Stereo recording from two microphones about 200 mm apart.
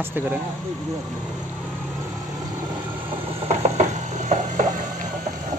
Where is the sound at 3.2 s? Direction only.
30° right (ahead or behind).